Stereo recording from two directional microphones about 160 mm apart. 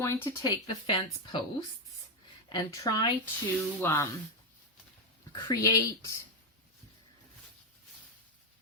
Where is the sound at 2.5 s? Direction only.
25° left (ahead or behind).